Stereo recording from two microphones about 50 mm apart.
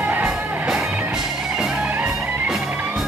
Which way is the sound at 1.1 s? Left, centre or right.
Centre.